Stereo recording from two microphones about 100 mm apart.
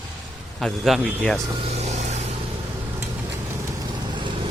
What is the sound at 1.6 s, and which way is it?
Vehicle, 90° right.